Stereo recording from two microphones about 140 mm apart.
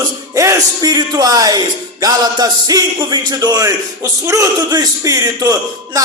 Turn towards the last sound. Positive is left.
turn(degrees=-25)  # may be behind; listen again after turning